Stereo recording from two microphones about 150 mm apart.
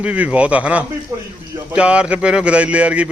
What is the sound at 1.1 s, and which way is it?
Speech, 20° right (ahead or behind).